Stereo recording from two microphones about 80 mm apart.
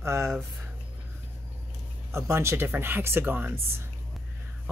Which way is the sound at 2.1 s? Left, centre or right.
Right.